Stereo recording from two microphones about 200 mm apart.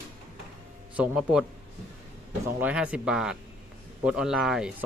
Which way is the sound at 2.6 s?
5° right (ahead or behind).